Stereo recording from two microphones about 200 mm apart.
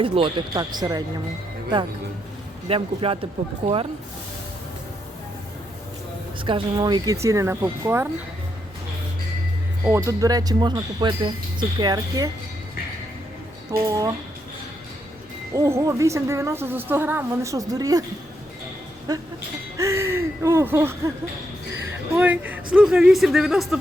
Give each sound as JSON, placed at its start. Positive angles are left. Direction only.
{"t": 0.0, "sound": "speech", "side_deg": -25}
{"t": 2.6, "sound": "speech", "side_deg": -30}
{"t": 6.4, "sound": "speech", "side_deg": -25}
{"t": 9.8, "sound": "speech", "side_deg": -15}
{"t": 13.7, "sound": "speech", "side_deg": -20}
{"t": 15.5, "sound": "speech", "side_deg": -15}
{"t": 19.1, "sound": "speech", "side_deg": -20}
{"t": 22.1, "sound": "a man's voice", "side_deg": -10}